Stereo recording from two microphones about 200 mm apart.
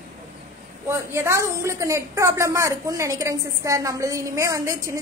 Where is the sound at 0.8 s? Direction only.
15° right (ahead or behind).